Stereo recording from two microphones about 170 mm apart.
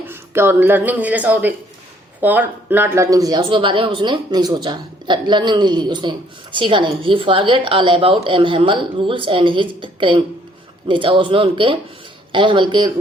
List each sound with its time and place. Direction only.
0.0 s a woman's voice: 15° right (ahead or behind)